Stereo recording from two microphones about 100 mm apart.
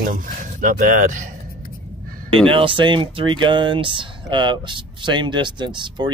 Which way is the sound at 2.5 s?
60° right (ahead or behind).